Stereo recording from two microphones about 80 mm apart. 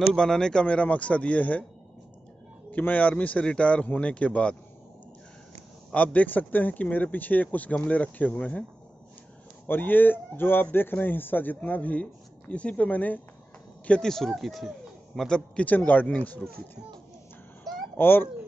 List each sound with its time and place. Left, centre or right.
0.1 s a man's voice: centre
2.7 s a man's voice: left
6.1 s speech: left
9.7 s speech: left
13.8 s a man's voice: centre
15.6 s speech: left
17.9 s speech: left